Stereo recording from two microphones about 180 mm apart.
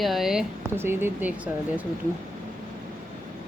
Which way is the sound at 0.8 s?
10° right (ahead or behind).